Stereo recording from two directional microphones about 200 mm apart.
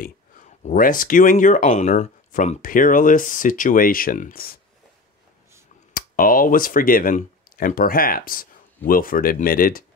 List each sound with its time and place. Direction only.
0.0 s speech: 40° left (ahead or behind)
5.9 s speech: 45° left (ahead or behind)